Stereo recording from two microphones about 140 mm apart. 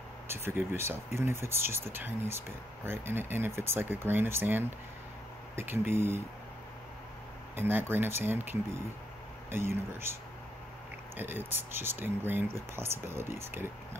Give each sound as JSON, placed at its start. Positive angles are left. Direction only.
{"t": 0.3, "sound": "speech", "side_deg": -15}
{"t": 7.5, "sound": "speech", "side_deg": -15}
{"t": 11.1, "sound": "speech", "side_deg": -15}